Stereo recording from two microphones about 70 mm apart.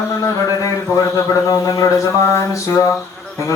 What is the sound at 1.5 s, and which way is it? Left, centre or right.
Mantra, left.